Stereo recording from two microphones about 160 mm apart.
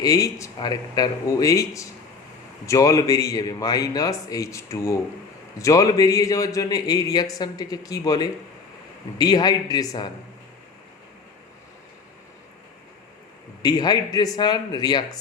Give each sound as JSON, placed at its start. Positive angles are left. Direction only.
{"t": 0.0, "sound": "speech", "side_deg": 20}
{"t": 13.6, "sound": "speech", "side_deg": 25}